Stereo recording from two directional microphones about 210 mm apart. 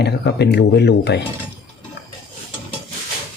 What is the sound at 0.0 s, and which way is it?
Speech, 55° left (ahead or behind).